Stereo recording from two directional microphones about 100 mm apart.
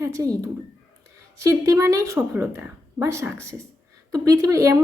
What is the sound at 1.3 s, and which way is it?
A woman's voice, 30° right (ahead or behind).